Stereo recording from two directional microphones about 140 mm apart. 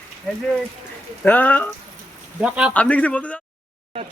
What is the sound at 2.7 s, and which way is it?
Speech, 10° left (ahead or behind).